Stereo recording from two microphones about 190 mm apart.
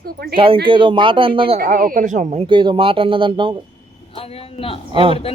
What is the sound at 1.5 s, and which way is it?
Speech, 50° right (ahead or behind).